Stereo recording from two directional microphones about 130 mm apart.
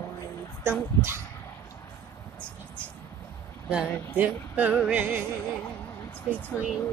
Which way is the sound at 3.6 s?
10° right (ahead or behind).